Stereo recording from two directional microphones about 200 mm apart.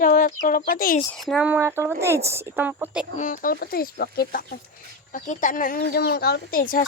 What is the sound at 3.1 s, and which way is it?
Speech, 40° left (ahead or behind).